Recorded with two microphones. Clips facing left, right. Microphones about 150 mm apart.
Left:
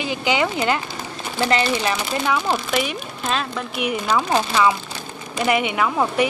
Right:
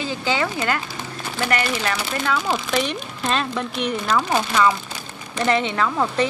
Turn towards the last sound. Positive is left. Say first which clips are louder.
# left 1 dB
turn(degrees=15)  # may be behind; listen again after turning